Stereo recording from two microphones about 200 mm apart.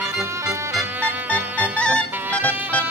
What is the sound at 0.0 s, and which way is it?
Music, 15° right (ahead or behind).